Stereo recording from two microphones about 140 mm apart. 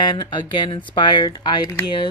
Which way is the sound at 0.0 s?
35° left (ahead or behind).